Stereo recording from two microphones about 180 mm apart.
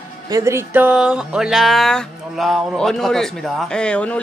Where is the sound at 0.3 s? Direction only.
15° right (ahead or behind).